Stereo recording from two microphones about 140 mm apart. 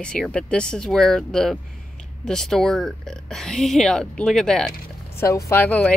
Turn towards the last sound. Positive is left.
turn(degrees=10)  # may be behind; listen again after turning